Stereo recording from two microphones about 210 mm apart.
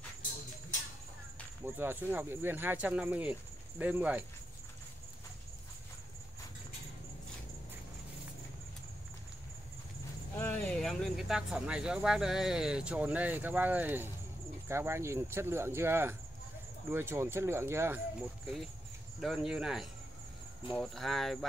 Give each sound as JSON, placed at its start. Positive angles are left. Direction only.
{"t": 1.6, "sound": "speech", "side_deg": -10}
{"t": 10.3, "sound": "speech", "side_deg": 10}
{"t": 19.1, "sound": "speech", "side_deg": 0}